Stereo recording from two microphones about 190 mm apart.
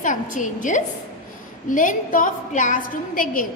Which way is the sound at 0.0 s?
45° left (ahead or behind).